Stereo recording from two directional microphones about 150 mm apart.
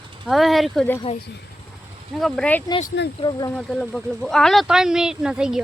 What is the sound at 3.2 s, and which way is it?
Speech, 25° left (ahead or behind).